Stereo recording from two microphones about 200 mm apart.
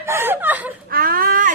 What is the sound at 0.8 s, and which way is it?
Baby cry, 45° right (ahead or behind).